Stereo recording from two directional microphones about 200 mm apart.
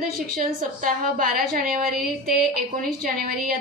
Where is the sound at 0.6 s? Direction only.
45° right (ahead or behind).